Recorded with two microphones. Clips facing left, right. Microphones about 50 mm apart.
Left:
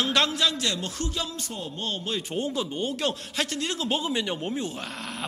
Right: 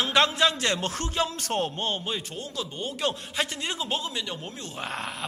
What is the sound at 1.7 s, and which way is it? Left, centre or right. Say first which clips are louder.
Speech: right 2 dB; right.